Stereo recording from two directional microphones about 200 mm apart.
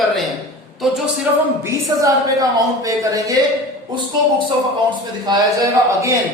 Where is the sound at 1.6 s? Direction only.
15° right (ahead or behind).